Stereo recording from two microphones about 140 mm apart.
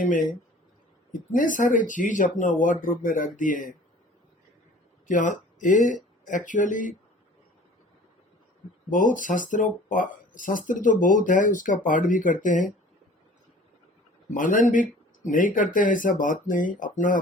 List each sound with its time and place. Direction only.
0.0 s speech: 70° left (ahead or behind)
5.0 s speech: 65° left (ahead or behind)
8.9 s speech: 70° left (ahead or behind)
14.3 s speech: 70° left (ahead or behind)